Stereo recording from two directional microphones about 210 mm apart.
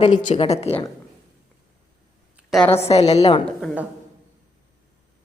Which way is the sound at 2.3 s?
Centre (ahead or behind).